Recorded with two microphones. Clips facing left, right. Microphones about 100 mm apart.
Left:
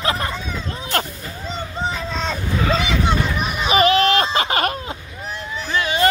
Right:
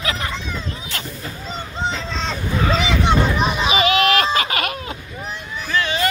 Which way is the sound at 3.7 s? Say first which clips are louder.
Left 4 dB; 40° left (ahead or behind).